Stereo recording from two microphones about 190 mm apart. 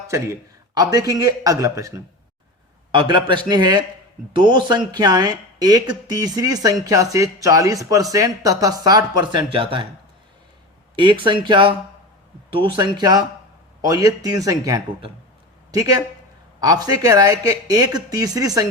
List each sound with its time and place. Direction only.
0.1 s speech: 20° right (ahead or behind)
2.9 s speech: 25° right (ahead or behind)
10.9 s speech: 25° right (ahead or behind)